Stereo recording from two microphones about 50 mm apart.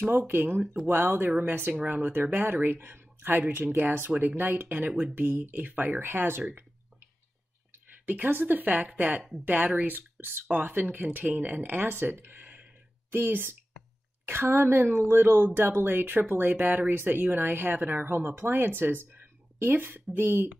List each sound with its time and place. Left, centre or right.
0.1 s speech: right